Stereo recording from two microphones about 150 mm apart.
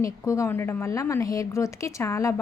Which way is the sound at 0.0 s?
20° left (ahead or behind).